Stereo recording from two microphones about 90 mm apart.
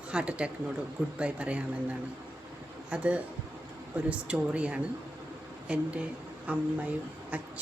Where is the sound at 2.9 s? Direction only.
15° right (ahead or behind).